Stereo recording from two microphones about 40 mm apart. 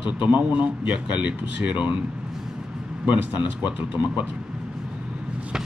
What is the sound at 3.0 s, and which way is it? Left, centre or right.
Speech, right.